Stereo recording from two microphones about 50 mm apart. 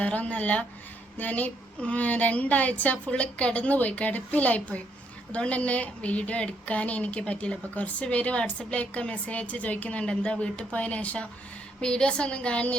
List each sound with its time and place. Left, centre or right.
0.0 s a woman's voice: left
11.8 s a woman's voice: centre